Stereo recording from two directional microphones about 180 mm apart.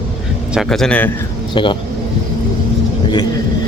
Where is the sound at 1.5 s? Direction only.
25° left (ahead or behind).